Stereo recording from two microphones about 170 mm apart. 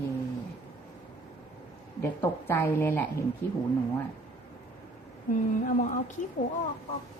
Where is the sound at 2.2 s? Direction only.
15° left (ahead or behind).